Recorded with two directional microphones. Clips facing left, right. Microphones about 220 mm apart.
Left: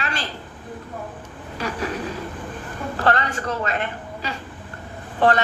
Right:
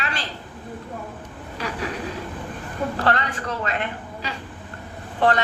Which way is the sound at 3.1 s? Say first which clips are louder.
Left 6 dB; 45° left (ahead or behind).